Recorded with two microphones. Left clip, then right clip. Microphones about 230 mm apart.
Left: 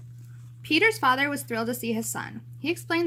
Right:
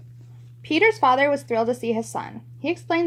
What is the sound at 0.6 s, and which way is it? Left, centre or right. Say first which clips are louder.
A woman's voice: right 4 dB; centre.